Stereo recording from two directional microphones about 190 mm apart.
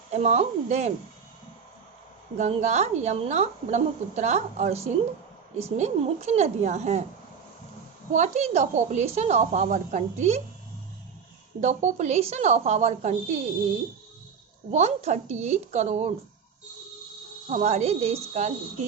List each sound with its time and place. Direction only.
0.1 s a woman's voice: 35° right (ahead or behind)
2.4 s a woman's voice: 35° right (ahead or behind)
8.1 s a woman's voice: 35° right (ahead or behind)
11.6 s a woman's voice: 40° right (ahead or behind)
14.7 s a woman's voice: 35° right (ahead or behind)
17.5 s a woman's voice: 35° right (ahead or behind)